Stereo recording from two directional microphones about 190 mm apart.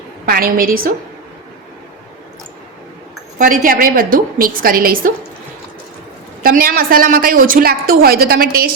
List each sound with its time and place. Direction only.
0.3 s a woman's voice: 50° right (ahead or behind)
3.3 s a woman's voice: 45° right (ahead or behind)
6.4 s a woman's voice: 50° right (ahead or behind)